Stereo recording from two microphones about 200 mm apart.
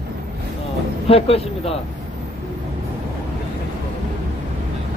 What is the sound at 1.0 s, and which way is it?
Speech, 30° left (ahead or behind).